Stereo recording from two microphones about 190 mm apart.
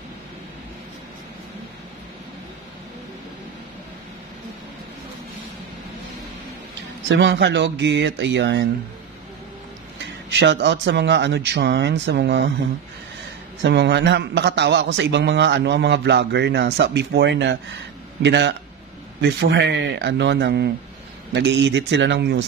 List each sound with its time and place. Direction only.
7.1 s speech: 70° right (ahead or behind)
10.3 s a man's voice: 70° right (ahead or behind)
13.6 s a man's voice: 65° right (ahead or behind)